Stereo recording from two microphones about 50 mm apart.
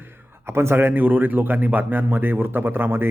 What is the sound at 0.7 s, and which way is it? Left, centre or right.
A man's voice, right.